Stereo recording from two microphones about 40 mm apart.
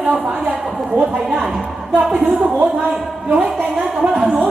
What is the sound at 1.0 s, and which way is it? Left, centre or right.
Speech, centre.